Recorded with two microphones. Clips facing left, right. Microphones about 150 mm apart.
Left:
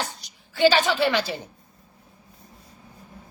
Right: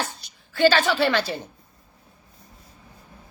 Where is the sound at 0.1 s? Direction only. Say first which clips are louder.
Even; 15° left (ahead or behind).